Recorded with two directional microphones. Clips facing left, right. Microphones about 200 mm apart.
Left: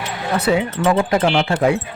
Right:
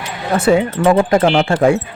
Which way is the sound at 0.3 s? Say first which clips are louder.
Right 5 dB; 50° right (ahead or behind).